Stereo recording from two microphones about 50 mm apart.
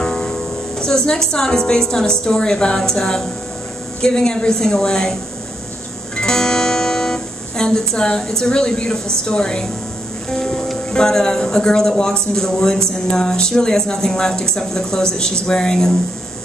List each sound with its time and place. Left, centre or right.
0.0 s music: centre
1.3 s speech: centre
6.1 s music: centre
9.2 s speech: centre